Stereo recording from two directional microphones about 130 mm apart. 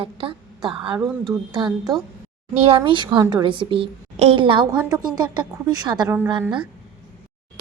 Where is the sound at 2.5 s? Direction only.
45° right (ahead or behind).